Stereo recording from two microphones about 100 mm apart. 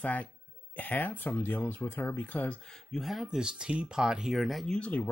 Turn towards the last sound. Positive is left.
turn(degrees=10)  # may be behind; listen again after turning